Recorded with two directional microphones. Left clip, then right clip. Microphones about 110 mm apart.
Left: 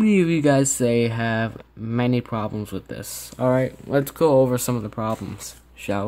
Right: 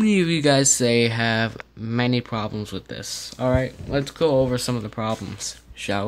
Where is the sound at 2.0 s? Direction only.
15° left (ahead or behind).